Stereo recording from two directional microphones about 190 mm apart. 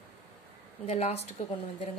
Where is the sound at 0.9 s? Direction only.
35° left (ahead or behind).